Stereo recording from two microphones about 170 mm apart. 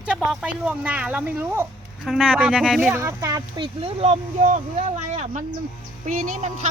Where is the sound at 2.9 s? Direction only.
20° right (ahead or behind).